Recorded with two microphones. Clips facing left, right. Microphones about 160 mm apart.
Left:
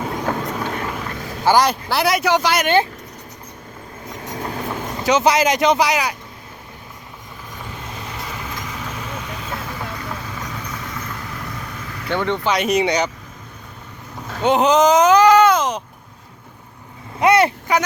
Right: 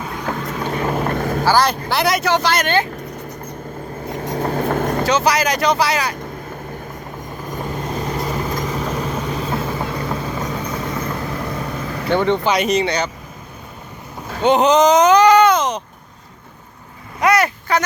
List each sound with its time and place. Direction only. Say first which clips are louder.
0.3 s vehicle: even; 15° left (ahead or behind)
0.9 s vehicle: right 8 dB; 50° right (ahead or behind)
1.5 s speech: left 2 dB; 15° left (ahead or behind)
4.1 s vehicle: right 6 dB; 30° right (ahead or behind)
4.4 s vehicle: right 8 dB; 45° right (ahead or behind)
5.0 s speech: left 4 dB; 20° left (ahead or behind)
7.4 s vehicle: right 9 dB; 45° right (ahead or behind)
12.1 s speech: right 4 dB; 20° right (ahead or behind)
12.6 s speech: even; 15° left (ahead or behind)
14.3 s speech: right 2 dB; 5° left (ahead or behind)
17.2 s vehicle: left 2 dB; 25° left (ahead or behind)
17.7 s speech: right 3 dB; 15° left (ahead or behind)